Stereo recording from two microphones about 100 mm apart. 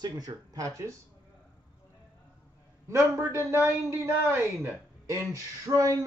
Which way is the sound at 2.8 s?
30° right (ahead or behind).